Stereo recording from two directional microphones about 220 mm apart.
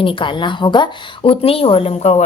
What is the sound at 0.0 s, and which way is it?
A woman's voice, 20° left (ahead or behind).